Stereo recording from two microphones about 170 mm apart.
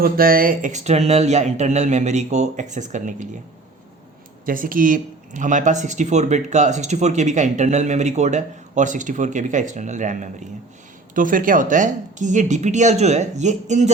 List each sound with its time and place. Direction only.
0.0 s speech: 60° right (ahead or behind)
4.4 s speech: 55° right (ahead or behind)